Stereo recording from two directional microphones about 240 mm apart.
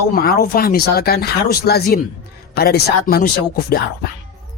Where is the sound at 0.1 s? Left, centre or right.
Left.